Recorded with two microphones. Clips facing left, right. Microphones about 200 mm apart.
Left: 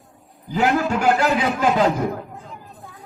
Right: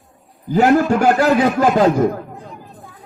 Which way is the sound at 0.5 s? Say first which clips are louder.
Right 6 dB; 40° right (ahead or behind).